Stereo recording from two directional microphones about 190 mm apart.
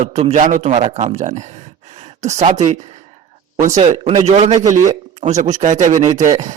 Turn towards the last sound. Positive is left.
turn(degrees=-40)  # may be behind; listen again after turning